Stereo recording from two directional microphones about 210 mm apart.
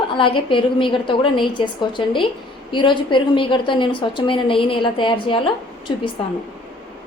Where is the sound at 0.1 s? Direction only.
25° left (ahead or behind).